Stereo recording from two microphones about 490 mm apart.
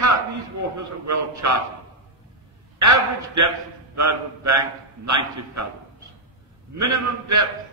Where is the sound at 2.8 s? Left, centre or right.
Right.